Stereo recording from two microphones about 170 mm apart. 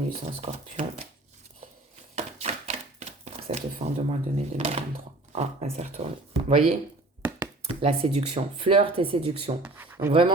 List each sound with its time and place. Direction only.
0.4 s speech: 40° right (ahead or behind)
2.1 s speech: 40° right (ahead or behind)
9.6 s speech: 10° right (ahead or behind)
10.1 s speech: 30° right (ahead or behind)